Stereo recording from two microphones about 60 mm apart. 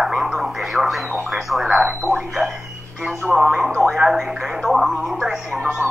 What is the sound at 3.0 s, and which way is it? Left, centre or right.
Speech, centre.